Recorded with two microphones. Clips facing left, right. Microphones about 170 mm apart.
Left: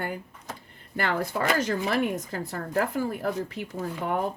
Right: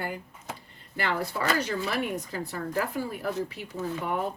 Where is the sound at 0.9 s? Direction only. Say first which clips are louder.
Left 2 dB; 50° left (ahead or behind).